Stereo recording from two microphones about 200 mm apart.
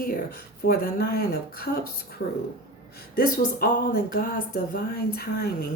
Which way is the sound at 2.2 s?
65° left (ahead or behind).